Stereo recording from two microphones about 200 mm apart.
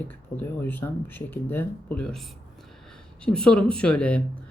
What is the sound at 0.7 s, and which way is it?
Speech, 10° left (ahead or behind).